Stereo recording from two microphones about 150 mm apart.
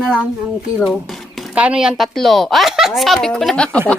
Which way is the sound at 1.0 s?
Centre (ahead or behind).